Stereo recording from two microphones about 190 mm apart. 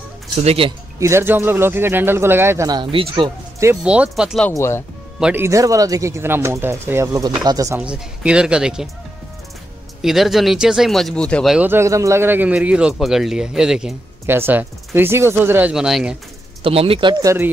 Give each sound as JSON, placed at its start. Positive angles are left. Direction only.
{"t": 0.4, "sound": "speech", "side_deg": -30}
{"t": 0.9, "sound": "speech", "side_deg": -15}
{"t": 3.5, "sound": "speech", "side_deg": -10}
{"t": 4.5, "sound": "speech", "side_deg": 15}
{"t": 5.2, "sound": "speech", "side_deg": -10}
{"t": 7.8, "sound": "speech", "side_deg": -5}
{"t": 10.0, "sound": "speech", "side_deg": 0}
{"t": 16.6, "sound": "speech", "side_deg": -30}